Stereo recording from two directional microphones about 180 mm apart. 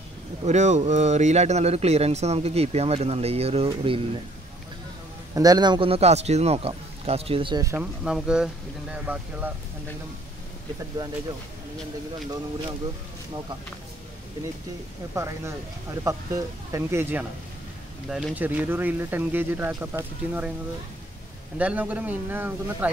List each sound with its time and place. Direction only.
0.4 s speech: 40° right (ahead or behind)
5.3 s speech: 20° right (ahead or behind)
7.7 s speech: 5° right (ahead or behind)
15.1 s speech: 15° right (ahead or behind)
21.5 s speech: 10° right (ahead or behind)